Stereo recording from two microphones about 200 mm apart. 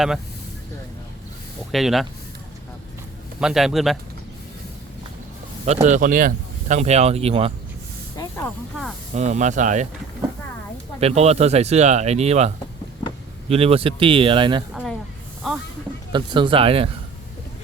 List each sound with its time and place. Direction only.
1.7 s a man's voice: centre (ahead or behind)
3.4 s a man's voice: centre (ahead or behind)
5.6 s speech: 35° right (ahead or behind)
8.1 s speech: 15° left (ahead or behind)
9.1 s speech: 35° right (ahead or behind)
11.0 s speech: 30° right (ahead or behind)
15.4 s a man's voice: centre (ahead or behind)
16.1 s speech: 25° right (ahead or behind)